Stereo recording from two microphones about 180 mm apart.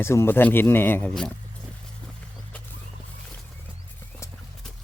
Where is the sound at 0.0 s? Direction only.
15° left (ahead or behind).